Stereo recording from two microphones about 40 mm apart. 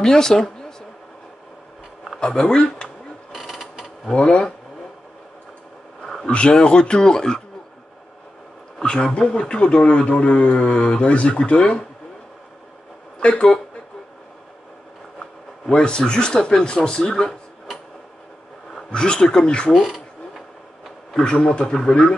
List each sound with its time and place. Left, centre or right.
0.0 s speech: centre
2.1 s speech: left
3.3 s mechanisms: centre
4.1 s speech: left
6.3 s speech: left
8.8 s speech: left
13.2 s speech: left
15.7 s speech: left
18.9 s speech: centre
19.7 s mechanisms: centre
21.2 s a man's voice: centre